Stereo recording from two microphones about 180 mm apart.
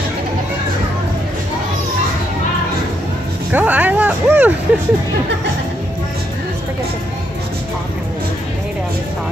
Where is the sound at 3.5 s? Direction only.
10° right (ahead or behind).